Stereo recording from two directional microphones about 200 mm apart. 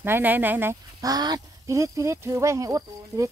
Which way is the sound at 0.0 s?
10° right (ahead or behind).